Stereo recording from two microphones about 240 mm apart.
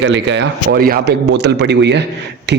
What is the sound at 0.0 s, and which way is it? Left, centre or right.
A man's voice, right.